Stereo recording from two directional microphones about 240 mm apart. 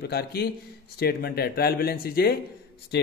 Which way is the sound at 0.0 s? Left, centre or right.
Left.